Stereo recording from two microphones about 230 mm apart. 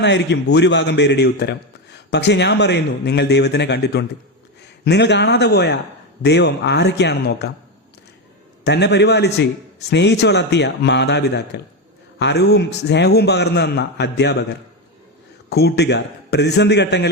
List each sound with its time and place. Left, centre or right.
0.0 s a man's voice: left
8.6 s a man's voice: left
15.4 s a man's voice: left